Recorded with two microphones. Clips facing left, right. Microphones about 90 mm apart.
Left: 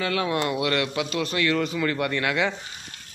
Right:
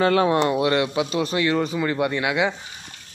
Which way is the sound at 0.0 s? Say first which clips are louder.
Right 7 dB; 35° right (ahead or behind).